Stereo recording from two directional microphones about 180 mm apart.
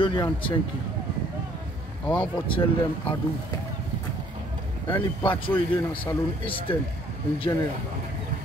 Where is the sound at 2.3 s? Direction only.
25° left (ahead or behind).